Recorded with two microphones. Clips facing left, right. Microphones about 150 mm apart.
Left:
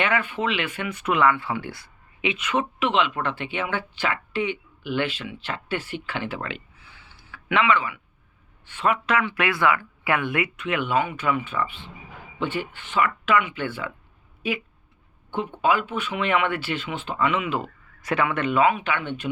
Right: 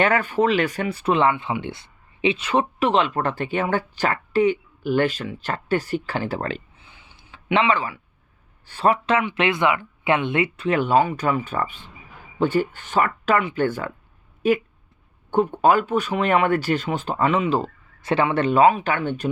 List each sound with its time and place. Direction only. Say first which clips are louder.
0.0 s speech: right 5 dB; 40° right (ahead or behind)
6.7 s a sound: right 1 dB; 20° right (ahead or behind)
8.6 s speech: right 4 dB; 35° right (ahead or behind)